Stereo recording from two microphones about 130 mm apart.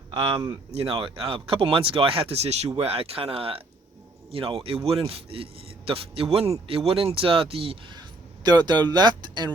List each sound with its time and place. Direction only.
0.1 s speech: 40° right (ahead or behind)